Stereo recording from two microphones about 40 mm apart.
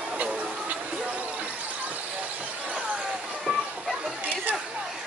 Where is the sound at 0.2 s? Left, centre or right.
Right.